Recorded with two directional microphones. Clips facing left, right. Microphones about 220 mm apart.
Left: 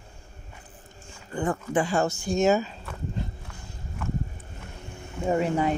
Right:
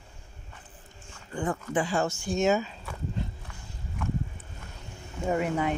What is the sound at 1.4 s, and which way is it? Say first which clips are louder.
Speech: left 3 dB; 45° left (ahead or behind).